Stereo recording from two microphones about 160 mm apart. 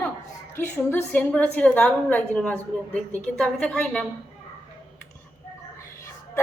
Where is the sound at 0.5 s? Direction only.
15° left (ahead or behind).